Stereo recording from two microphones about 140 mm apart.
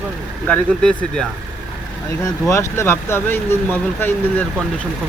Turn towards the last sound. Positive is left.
turn(degrees=10)  # may be behind; listen again after turning